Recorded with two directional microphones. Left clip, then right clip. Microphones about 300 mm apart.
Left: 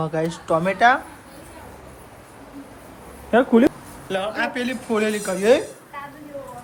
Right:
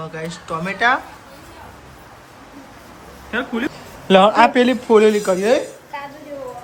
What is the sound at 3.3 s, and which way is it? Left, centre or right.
Speech, centre.